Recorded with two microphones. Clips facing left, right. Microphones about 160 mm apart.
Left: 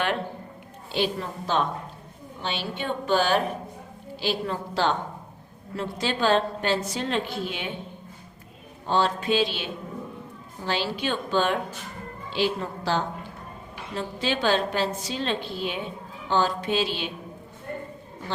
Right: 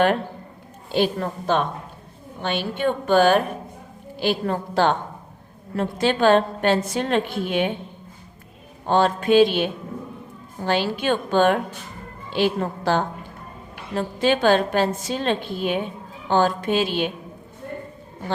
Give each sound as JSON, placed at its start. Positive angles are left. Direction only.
{"t": 0.9, "sound": "a woman's voice", "side_deg": -50}
{"t": 8.9, "sound": "a woman's voice", "side_deg": -55}